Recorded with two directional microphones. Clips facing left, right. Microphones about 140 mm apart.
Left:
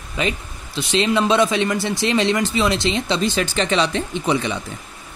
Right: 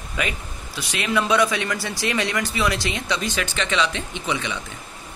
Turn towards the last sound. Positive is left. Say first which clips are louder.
# left 6 dB
turn(degrees=35)  # may be behind; listen again after turning